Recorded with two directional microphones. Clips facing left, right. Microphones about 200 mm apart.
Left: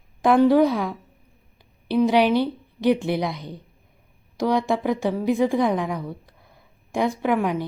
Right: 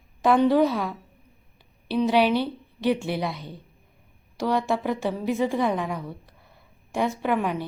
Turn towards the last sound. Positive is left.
turn(degrees=10)  # may be behind; listen again after turning